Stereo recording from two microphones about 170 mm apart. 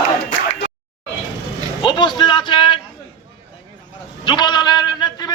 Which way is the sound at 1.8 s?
25° left (ahead or behind).